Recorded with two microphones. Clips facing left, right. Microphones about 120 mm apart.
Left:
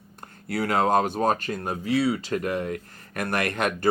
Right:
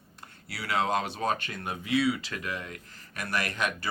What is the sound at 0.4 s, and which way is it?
Speech, 50° left (ahead or behind).